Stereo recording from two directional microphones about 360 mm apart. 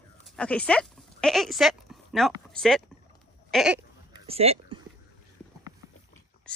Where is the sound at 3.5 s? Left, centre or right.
Centre.